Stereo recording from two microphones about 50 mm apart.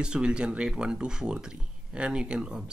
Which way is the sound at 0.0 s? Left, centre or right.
Centre.